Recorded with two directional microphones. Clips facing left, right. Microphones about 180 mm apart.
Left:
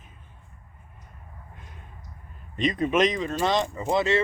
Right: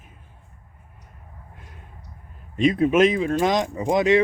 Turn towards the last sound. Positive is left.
turn(degrees=-15)  # may be behind; listen again after turning